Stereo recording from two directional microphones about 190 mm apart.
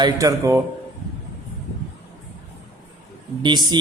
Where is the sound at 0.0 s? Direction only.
15° right (ahead or behind).